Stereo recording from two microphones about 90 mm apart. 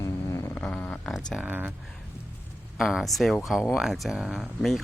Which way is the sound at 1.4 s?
20° right (ahead or behind).